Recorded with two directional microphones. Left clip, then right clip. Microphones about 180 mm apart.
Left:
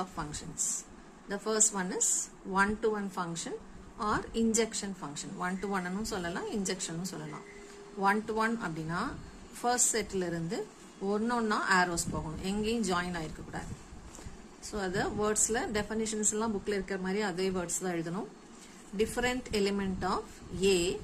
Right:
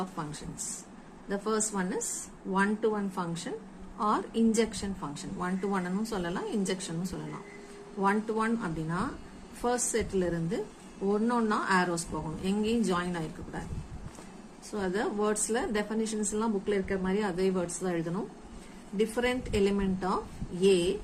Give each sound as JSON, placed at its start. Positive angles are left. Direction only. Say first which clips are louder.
{"t": 0.0, "sound": "a woman's voice", "louder": "right 1 dB", "side_deg": 15}
{"t": 14.7, "sound": "a woman's voice", "louder": "right 2 dB", "side_deg": 20}